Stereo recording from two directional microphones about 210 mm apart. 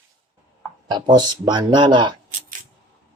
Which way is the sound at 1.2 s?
20° right (ahead or behind).